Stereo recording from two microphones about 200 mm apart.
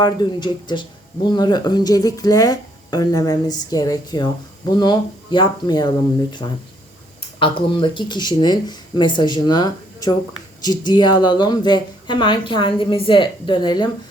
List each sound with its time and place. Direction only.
0.0 s speech: 20° left (ahead or behind)
7.3 s speech: 25° left (ahead or behind)